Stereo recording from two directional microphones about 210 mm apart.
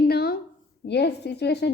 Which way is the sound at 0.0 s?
45° left (ahead or behind).